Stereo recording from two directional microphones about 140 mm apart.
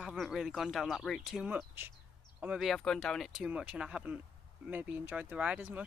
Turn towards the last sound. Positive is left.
turn(degrees=-10)  # may be behind; listen again after turning